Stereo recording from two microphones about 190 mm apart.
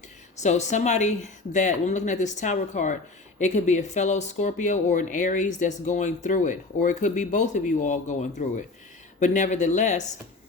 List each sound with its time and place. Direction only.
0.4 s speech: 35° left (ahead or behind)